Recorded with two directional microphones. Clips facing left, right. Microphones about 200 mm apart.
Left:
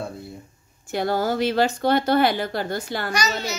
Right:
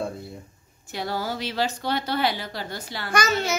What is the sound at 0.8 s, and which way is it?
Speech, 50° left (ahead or behind).